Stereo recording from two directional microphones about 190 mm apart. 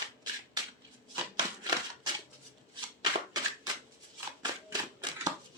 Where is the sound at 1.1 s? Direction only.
20° right (ahead or behind).